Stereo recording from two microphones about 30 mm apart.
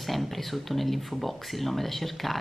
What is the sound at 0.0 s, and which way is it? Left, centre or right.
Speech, centre.